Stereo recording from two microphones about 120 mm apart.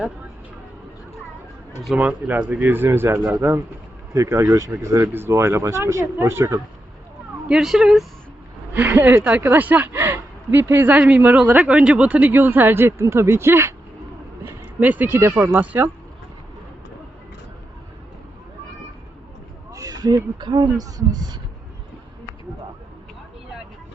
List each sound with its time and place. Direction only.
2.0 s a woman's voice: 15° right (ahead or behind)
7.4 s speech: 5° right (ahead or behind)
8.7 s a woman's voice: 15° right (ahead or behind)
19.7 s speech: 30° right (ahead or behind)